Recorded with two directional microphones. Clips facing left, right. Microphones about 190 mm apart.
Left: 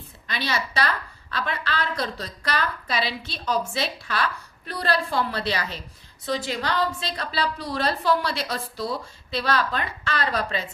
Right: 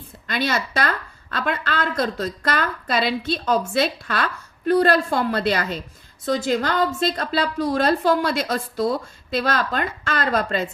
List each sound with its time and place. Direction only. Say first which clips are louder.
0.3 s a woman's voice: right 5 dB; 50° right (ahead or behind)